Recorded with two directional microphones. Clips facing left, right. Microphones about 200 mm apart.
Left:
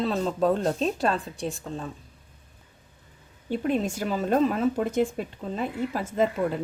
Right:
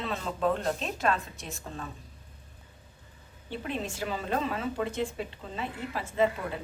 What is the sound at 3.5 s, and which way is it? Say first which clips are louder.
Speech: left 9 dB; 45° left (ahead or behind).